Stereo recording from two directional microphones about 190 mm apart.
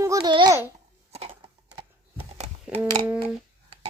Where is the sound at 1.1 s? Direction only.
30° right (ahead or behind).